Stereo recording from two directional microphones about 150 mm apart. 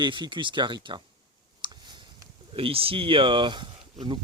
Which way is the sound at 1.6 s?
30° right (ahead or behind).